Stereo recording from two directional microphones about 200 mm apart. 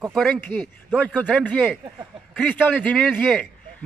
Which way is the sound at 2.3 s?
5° left (ahead or behind).